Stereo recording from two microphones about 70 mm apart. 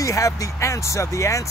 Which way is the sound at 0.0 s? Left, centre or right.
Left.